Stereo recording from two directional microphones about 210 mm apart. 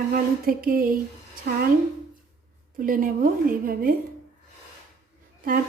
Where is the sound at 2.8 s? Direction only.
40° right (ahead or behind).